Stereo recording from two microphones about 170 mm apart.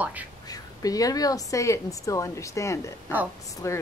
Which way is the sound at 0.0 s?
10° right (ahead or behind).